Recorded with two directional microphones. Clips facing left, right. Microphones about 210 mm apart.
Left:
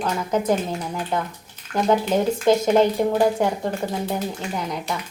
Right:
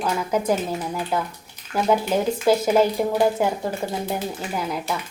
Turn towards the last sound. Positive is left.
turn(degrees=-5)  # may be behind; listen again after turning